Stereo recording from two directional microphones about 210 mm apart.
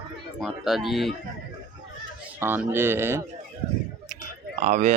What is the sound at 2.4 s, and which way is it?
Speech, 10° right (ahead or behind).